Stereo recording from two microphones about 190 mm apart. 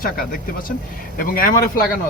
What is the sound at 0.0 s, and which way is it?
Speech, 50° left (ahead or behind).